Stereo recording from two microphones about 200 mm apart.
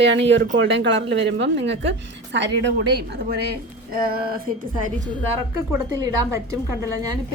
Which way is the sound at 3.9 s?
50° right (ahead or behind).